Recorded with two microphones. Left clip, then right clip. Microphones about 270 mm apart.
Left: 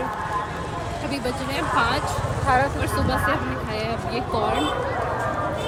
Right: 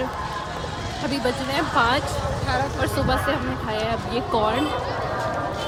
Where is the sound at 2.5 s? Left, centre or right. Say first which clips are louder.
Left 5 dB; left.